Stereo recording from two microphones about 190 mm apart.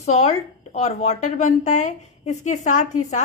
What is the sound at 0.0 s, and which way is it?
A woman's voice, 35° left (ahead or behind).